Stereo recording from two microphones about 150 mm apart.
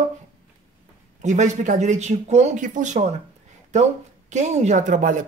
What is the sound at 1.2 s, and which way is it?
Speech, 55° right (ahead or behind).